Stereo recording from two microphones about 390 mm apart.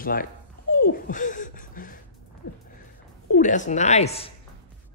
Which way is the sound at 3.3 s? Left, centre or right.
Centre.